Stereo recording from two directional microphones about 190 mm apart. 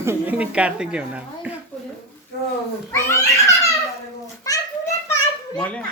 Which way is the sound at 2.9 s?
15° left (ahead or behind).